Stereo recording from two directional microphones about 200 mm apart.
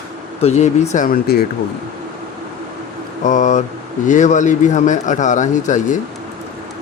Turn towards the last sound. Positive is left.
turn(degrees=40)  # may be behind; listen again after turning